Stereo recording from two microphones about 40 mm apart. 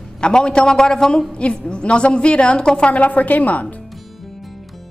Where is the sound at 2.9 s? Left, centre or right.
Left.